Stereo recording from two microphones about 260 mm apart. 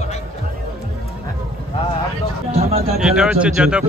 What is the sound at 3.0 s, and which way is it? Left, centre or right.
Speech, centre.